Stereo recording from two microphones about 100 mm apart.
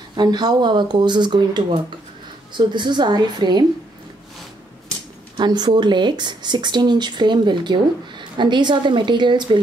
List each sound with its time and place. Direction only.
0.1 s speech: 45° right (ahead or behind)
5.4 s speech: 45° right (ahead or behind)